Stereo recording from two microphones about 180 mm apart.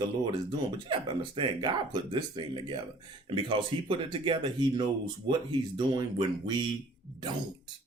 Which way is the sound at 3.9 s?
30° right (ahead or behind).